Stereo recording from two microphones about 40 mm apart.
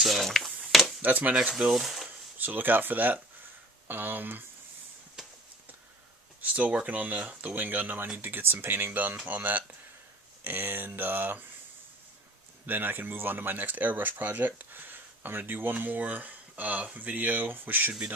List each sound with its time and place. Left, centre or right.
0.0 s a sound: centre
1.0 s speech: right
1.3 s speech: right
1.7 s speech: centre
2.4 s speech: right
5.2 s clip-clop: centre
6.4 s speech: right
8.2 s a sound: right
8.9 s speech: right
10.4 s a sound: right
12.6 s speech: right
17.5 s a sound: right